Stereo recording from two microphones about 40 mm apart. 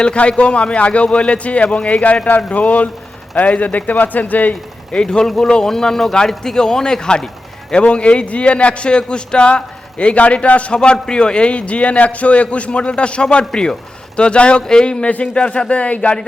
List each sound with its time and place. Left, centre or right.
0.0 s a man's voice: left
5.0 s a man's voice: centre
7.7 s a man's voice: left
10.8 s a man's voice: centre